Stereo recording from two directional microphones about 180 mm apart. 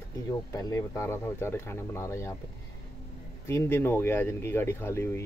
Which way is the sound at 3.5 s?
15° left (ahead or behind).